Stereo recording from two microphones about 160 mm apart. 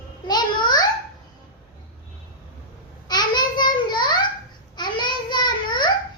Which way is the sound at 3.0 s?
25° left (ahead or behind).